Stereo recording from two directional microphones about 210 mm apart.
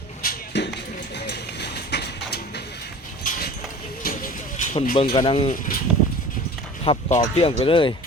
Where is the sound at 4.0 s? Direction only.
40° left (ahead or behind).